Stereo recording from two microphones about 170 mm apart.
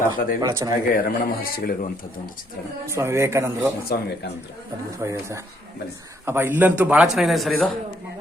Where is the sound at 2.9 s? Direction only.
15° right (ahead or behind).